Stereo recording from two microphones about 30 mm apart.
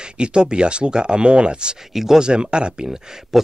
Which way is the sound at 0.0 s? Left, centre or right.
Right.